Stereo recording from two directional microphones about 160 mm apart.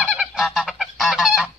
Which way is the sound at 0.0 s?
5° right (ahead or behind).